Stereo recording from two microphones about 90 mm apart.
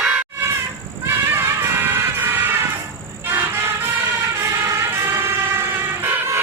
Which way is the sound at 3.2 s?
25° right (ahead or behind).